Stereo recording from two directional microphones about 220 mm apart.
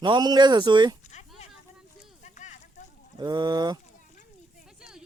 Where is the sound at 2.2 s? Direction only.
35° left (ahead or behind).